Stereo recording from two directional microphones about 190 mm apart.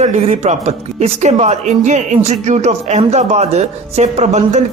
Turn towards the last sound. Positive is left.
turn(degrees=-35)  # may be behind; listen again after turning